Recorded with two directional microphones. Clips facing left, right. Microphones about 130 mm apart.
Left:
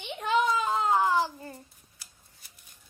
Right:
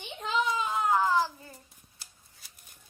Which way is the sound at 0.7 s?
25° left (ahead or behind).